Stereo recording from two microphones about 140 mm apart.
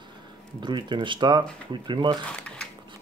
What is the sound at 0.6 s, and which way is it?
Speech, 35° right (ahead or behind).